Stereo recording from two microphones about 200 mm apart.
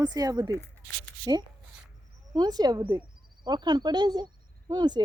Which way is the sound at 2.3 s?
20° right (ahead or behind).